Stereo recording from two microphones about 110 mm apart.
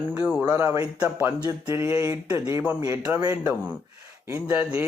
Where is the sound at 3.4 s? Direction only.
15° right (ahead or behind).